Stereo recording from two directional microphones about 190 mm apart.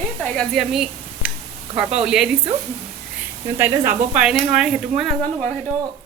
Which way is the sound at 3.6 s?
10° right (ahead or behind).